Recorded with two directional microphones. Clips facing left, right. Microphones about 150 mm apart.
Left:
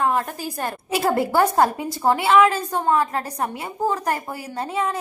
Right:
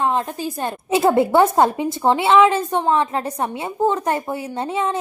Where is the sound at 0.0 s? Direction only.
20° right (ahead or behind).